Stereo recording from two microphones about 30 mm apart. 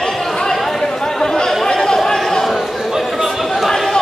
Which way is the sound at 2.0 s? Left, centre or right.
Centre.